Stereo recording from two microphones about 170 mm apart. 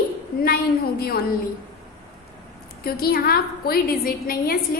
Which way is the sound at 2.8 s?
60° left (ahead or behind).